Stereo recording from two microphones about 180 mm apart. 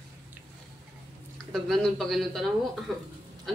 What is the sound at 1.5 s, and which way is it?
A man's voice, centre (ahead or behind).